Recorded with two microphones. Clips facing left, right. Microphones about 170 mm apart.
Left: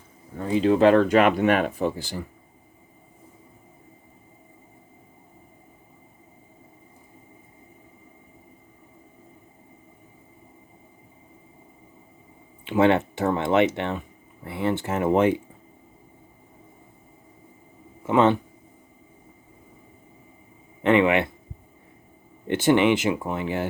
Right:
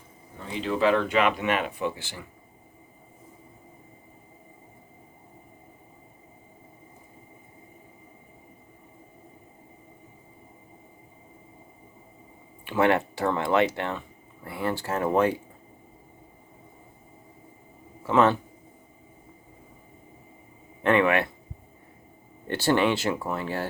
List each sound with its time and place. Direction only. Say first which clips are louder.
0.3 s speech: left 8 dB; 40° left (ahead or behind)
12.6 s speech: left 3 dB; 20° left (ahead or behind)
18.0 s speech: left 2 dB; 20° left (ahead or behind)
20.8 s speech: left 3 dB; 20° left (ahead or behind)
22.4 s speech: left 4 dB; 20° left (ahead or behind)